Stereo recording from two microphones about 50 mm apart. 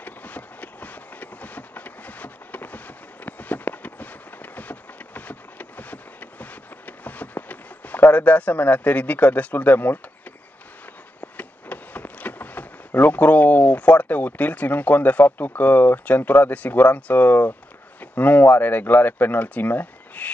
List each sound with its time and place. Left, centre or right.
0.0 s train: left
3.3 s a sound: left
11.1 s speech: left